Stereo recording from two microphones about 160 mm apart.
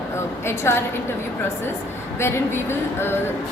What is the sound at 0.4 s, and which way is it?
Speech, 15° left (ahead or behind).